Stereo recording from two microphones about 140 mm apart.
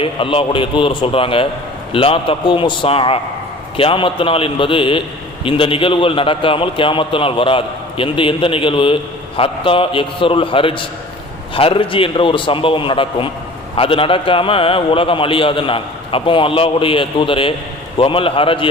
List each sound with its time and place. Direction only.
0.0 s a man's voice: 40° left (ahead or behind)